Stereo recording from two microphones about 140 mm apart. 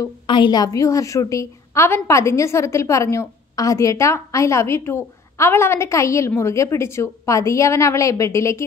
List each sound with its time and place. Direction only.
0.3 s a woman's voice: 30° left (ahead or behind)